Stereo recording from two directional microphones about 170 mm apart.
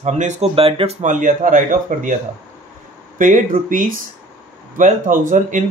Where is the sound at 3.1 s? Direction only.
50° right (ahead or behind).